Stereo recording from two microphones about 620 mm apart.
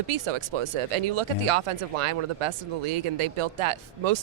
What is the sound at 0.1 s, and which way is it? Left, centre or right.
Speech, right.